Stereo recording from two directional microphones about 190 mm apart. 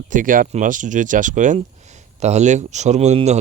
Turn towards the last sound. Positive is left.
turn(degrees=-35)  # may be behind; listen again after turning